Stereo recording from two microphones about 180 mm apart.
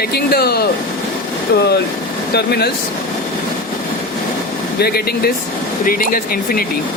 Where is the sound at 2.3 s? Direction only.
65° left (ahead or behind).